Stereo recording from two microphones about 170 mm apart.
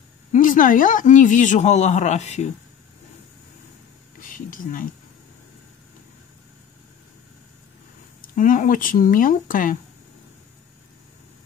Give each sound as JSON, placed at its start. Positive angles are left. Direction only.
{"t": 0.3, "sound": "speech", "side_deg": 50}
{"t": 4.2, "sound": "speech", "side_deg": 55}
{"t": 8.2, "sound": "speech", "side_deg": 50}